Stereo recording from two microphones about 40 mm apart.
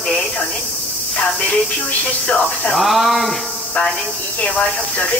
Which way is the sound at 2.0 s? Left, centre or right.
Left.